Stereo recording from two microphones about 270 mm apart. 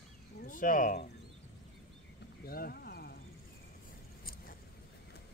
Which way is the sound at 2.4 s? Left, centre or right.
Left.